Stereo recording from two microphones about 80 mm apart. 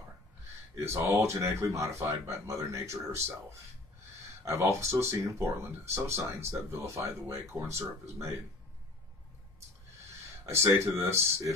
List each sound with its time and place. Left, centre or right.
0.8 s speech: right
4.5 s speech: right
10.4 s speech: right